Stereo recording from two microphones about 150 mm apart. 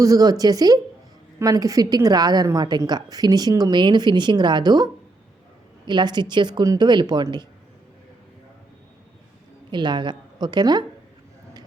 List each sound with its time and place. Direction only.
0.0 s a woman's voice: 25° right (ahead or behind)
9.7 s a woman's voice: 30° right (ahead or behind)